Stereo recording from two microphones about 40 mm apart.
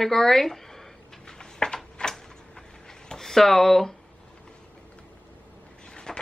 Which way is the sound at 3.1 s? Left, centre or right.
Centre.